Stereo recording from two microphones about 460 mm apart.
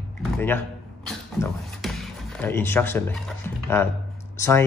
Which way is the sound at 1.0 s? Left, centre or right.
Centre.